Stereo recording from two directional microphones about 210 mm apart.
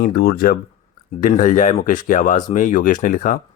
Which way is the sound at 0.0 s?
45° left (ahead or behind).